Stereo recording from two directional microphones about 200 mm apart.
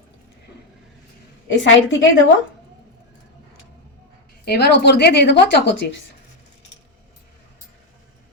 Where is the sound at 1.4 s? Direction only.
65° left (ahead or behind).